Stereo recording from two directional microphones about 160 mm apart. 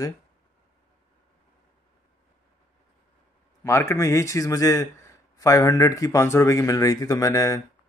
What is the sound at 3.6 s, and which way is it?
Speech, 20° left (ahead or behind).